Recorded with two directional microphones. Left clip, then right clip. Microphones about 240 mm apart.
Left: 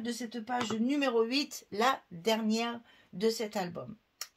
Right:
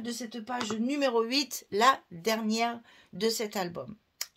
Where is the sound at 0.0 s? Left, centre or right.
Right.